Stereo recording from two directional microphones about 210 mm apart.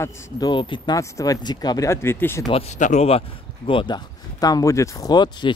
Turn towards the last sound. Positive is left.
turn(degrees=20)  # may be behind; listen again after turning